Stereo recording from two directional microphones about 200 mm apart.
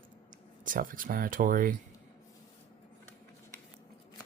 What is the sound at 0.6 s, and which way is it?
Speech, 45° right (ahead or behind).